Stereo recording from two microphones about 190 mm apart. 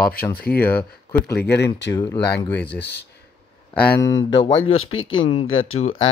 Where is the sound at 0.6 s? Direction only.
10° left (ahead or behind).